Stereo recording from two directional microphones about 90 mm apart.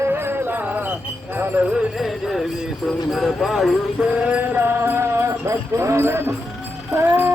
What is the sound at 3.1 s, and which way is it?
Speech, centre (ahead or behind).